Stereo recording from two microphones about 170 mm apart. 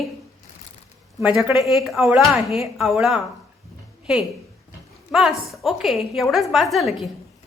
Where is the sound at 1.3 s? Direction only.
Centre (ahead or behind).